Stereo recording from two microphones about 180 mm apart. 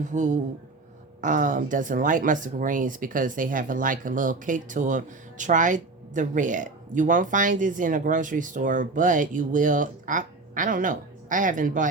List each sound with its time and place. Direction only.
0.0 s speech: 45° right (ahead or behind)